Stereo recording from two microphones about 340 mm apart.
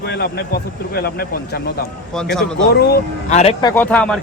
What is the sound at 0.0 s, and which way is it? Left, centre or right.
Speech, left.